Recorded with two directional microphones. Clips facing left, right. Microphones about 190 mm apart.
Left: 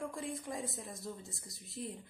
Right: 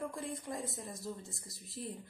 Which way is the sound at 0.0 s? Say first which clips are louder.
Even; centre (ahead or behind).